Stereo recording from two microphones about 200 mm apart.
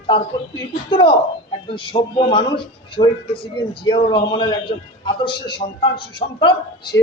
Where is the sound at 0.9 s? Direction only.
25° left (ahead or behind).